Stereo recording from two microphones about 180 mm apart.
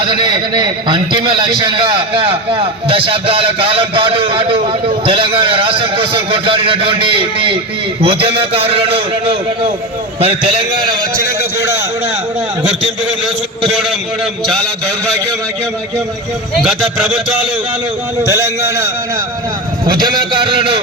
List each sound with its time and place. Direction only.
0.0 s a man's voice: 25° right (ahead or behind)
19.9 s a man's voice: 25° right (ahead or behind)